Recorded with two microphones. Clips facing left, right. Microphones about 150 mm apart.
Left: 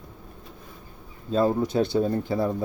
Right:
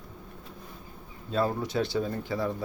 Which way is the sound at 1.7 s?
45° left (ahead or behind).